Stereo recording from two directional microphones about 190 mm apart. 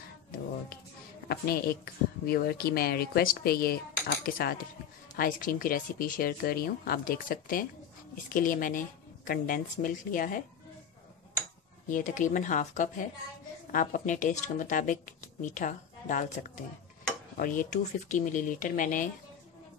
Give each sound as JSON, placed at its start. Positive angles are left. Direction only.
{"t": 1.3, "sound": "speech", "side_deg": 55}
{"t": 11.9, "sound": "speech", "side_deg": 45}
{"t": 17.4, "sound": "speech", "side_deg": 40}